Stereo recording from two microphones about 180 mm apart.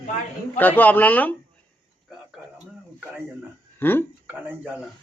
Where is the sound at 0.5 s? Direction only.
10° left (ahead or behind).